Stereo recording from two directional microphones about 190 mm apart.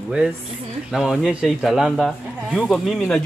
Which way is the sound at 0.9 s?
Centre (ahead or behind).